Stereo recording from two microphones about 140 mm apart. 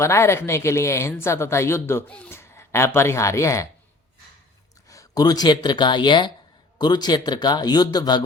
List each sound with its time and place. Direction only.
0.0 s speech: 20° left (ahead or behind)
2.3 s speech: 20° left (ahead or behind)
4.9 s speech: 25° left (ahead or behind)